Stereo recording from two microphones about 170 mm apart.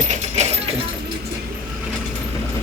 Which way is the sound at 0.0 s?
45° right (ahead or behind).